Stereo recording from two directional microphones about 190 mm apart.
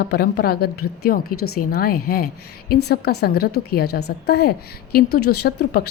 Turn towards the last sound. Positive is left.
turn(degrees=55)  # may be behind; listen again after turning